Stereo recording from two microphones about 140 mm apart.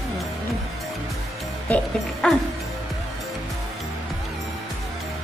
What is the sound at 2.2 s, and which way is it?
Speech, 5° left (ahead or behind).